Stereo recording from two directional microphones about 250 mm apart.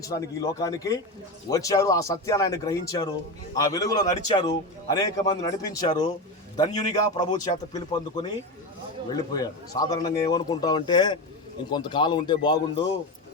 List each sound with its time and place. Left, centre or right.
0.0 s speech: centre